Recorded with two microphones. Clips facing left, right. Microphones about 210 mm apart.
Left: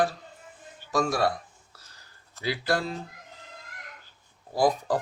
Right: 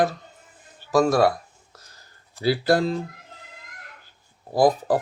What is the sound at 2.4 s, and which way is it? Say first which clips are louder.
Speech: right 8 dB; 35° right (ahead or behind).